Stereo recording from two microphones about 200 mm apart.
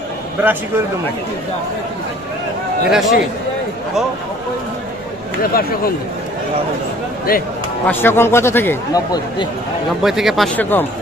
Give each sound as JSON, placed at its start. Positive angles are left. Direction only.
{"t": 0.4, "sound": "a man's voice", "side_deg": -10}
{"t": 2.9, "sound": "speech", "side_deg": 0}
{"t": 5.5, "sound": "speech", "side_deg": 50}
{"t": 7.8, "sound": "a man's voice", "side_deg": 10}
{"t": 10.0, "sound": "speech", "side_deg": 0}